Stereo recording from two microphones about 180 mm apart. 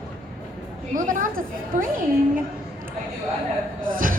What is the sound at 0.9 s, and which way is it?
Speech, 45° right (ahead or behind).